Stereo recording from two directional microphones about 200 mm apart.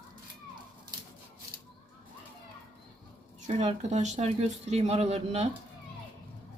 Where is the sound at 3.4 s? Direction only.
35° right (ahead or behind).